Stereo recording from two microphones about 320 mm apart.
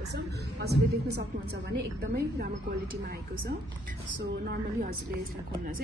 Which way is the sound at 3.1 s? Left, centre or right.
Right.